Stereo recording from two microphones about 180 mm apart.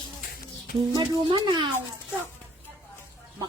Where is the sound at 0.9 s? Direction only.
25° right (ahead or behind).